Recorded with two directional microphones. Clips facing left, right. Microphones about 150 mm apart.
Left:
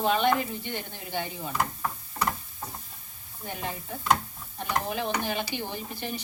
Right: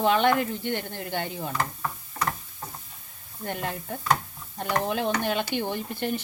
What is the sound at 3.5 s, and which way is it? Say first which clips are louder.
Speech: right 3 dB; 60° right (ahead or behind).